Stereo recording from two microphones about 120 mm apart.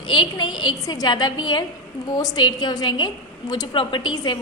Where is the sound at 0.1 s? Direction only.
40° left (ahead or behind).